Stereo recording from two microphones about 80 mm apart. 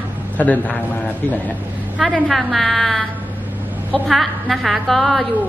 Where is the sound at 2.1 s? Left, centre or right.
Centre.